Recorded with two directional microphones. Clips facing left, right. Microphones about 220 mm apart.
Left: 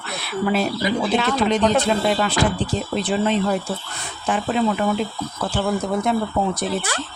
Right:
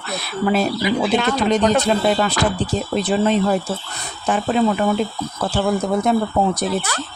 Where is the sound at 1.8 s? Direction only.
40° right (ahead or behind).